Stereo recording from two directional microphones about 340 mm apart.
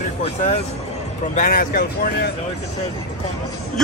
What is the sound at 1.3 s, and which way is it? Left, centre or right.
Speech, left.